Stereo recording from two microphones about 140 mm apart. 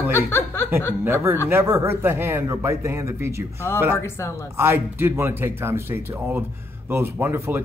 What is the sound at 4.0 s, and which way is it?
Speech, 20° left (ahead or behind).